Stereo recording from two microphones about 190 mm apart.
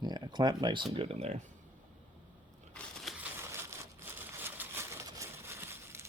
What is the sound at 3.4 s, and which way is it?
Crumpling, 15° right (ahead or behind).